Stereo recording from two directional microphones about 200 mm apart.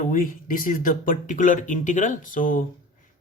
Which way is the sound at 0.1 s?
45° left (ahead or behind).